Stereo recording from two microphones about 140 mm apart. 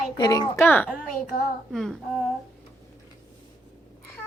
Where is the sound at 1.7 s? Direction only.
Centre (ahead or behind).